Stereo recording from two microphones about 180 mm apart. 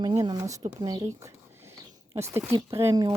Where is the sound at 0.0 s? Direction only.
20° right (ahead or behind).